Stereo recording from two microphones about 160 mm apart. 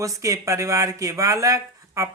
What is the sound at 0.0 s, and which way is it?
Speech, 20° right (ahead or behind).